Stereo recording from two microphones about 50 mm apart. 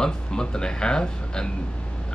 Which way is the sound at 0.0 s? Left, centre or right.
Centre.